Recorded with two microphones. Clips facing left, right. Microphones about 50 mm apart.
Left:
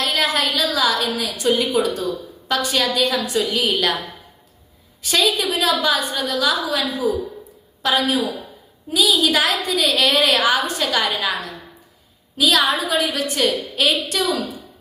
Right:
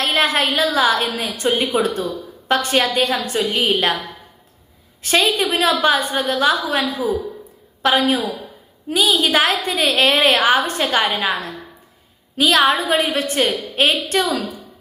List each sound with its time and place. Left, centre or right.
0.0 s a woman's voice: right
5.0 s a woman's voice: right